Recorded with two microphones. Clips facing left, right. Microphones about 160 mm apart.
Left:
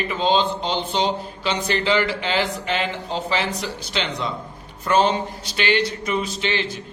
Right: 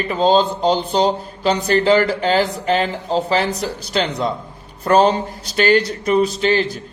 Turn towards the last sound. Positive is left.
turn(degrees=-40)  # may be behind; listen again after turning